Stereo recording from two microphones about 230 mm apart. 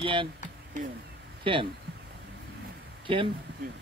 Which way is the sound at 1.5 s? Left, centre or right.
Right.